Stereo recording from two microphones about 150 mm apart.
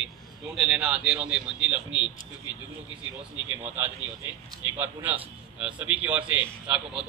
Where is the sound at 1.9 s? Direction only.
30° left (ahead or behind).